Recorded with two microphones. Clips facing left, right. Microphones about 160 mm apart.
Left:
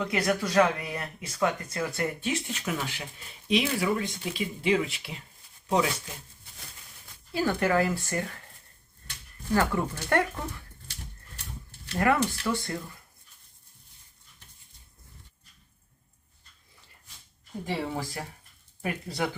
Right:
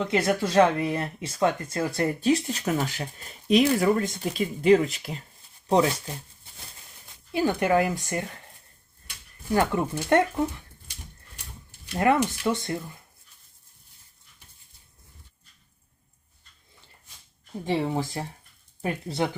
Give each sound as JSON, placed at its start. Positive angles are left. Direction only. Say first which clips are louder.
{"t": 0.0, "sound": "speech", "louder": "right 3 dB", "side_deg": -25}
{"t": 7.3, "sound": "speech", "louder": "right 3 dB", "side_deg": -20}
{"t": 11.9, "sound": "speech", "louder": "right 3 dB", "side_deg": -15}
{"t": 17.7, "sound": "speech", "louder": "right 6 dB", "side_deg": -25}